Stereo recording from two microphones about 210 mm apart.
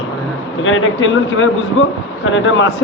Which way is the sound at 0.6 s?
70° left (ahead or behind).